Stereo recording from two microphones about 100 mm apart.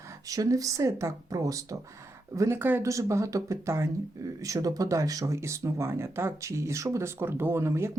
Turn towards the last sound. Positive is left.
turn(degrees=-25)  # may be behind; listen again after turning